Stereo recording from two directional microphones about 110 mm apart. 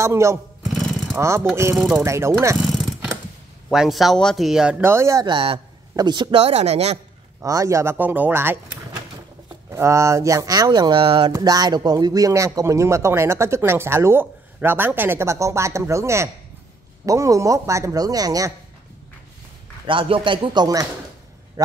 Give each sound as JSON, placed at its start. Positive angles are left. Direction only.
{"t": 0.0, "sound": "speech", "side_deg": -25}
{"t": 0.6, "sound": "jackhammer", "side_deg": 0}
{"t": 1.1, "sound": "speech", "side_deg": -20}
{"t": 2.6, "sound": "a sound", "side_deg": -5}
{"t": 3.7, "sound": "speech", "side_deg": -5}
{"t": 4.8, "sound": "speech", "side_deg": -25}
{"t": 5.2, "sound": "a man's voice", "side_deg": -50}
{"t": 5.9, "sound": "speech", "side_deg": -40}
{"t": 6.3, "sound": "speech", "side_deg": -70}
{"t": 7.4, "sound": "speech", "side_deg": -30}
{"t": 9.7, "sound": "speech", "side_deg": -25}
{"t": 11.3, "sound": "speech", "side_deg": -35}
{"t": 19.9, "sound": "a man's voice", "side_deg": -50}
{"t": 21.6, "sound": "a man's voice", "side_deg": -30}